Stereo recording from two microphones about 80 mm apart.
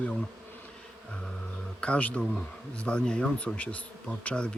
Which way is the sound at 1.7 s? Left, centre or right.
Centre.